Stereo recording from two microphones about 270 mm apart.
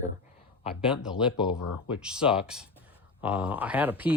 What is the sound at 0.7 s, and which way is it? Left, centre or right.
Speech, centre.